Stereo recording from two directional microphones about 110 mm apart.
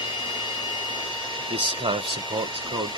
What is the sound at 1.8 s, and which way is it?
Speech, 45° right (ahead or behind).